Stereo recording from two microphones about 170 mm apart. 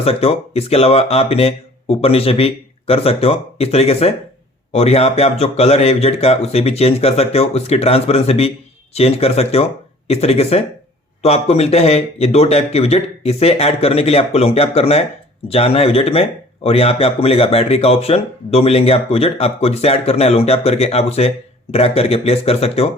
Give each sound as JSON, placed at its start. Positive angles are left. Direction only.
{"t": 0.0, "sound": "speech", "side_deg": 35}